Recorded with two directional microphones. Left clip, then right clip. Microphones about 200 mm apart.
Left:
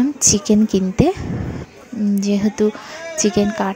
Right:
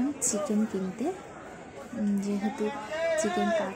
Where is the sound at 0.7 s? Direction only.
45° left (ahead or behind).